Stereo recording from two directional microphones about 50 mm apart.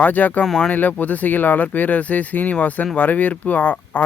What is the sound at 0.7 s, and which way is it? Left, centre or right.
Speech, left.